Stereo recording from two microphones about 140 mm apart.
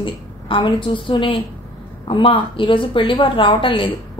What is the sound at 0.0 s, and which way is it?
A woman's voice, 40° left (ahead or behind).